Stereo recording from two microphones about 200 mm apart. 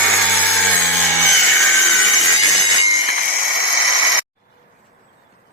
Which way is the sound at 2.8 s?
30° left (ahead or behind).